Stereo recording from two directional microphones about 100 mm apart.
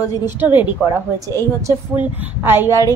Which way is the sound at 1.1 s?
35° right (ahead or behind).